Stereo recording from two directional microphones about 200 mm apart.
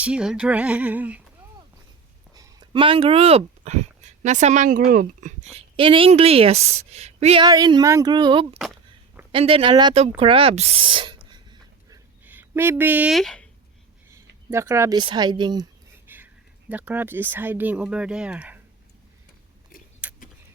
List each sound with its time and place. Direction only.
0.0 s speech: 5° right (ahead or behind)
2.3 s speech: 20° right (ahead or behind)
8.5 s speech: centre (ahead or behind)
9.3 s speech: 30° right (ahead or behind)
11.3 s a sound: 20° right (ahead or behind)
12.2 s speech: 10° right (ahead or behind)
14.1 s speech: 15° right (ahead or behind)
16.0 s speech: 10° right (ahead or behind)
20.0 s a sound: 5° right (ahead or behind)